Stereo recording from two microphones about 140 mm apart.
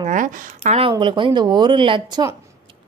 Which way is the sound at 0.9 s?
35° right (ahead or behind).